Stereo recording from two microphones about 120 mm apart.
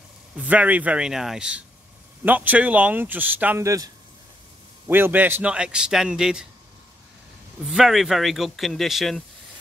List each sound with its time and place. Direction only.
0.4 s a man's voice: 10° right (ahead or behind)
3.6 s speech: 30° right (ahead or behind)
4.8 s a man's voice: 20° right (ahead or behind)
7.7 s speech: 5° right (ahead or behind)